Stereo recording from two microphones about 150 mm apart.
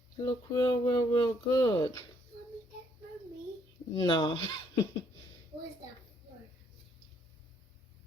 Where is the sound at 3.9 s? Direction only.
30° left (ahead or behind).